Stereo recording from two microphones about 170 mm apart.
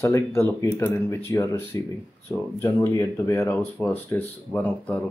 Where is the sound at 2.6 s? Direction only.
15° left (ahead or behind).